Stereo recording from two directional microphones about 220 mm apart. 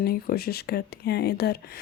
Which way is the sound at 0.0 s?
45° left (ahead or behind).